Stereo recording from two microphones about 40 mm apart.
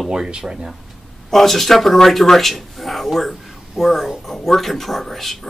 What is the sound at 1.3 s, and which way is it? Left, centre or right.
Speech, centre.